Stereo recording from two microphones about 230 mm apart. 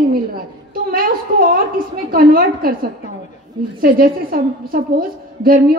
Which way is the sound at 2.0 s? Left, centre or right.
Right.